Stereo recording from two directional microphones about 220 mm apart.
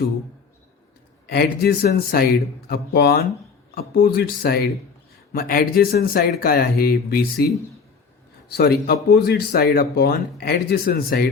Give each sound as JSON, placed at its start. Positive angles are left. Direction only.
{"t": 1.3, "sound": "speech", "side_deg": 45}
{"t": 8.4, "sound": "speech", "side_deg": 45}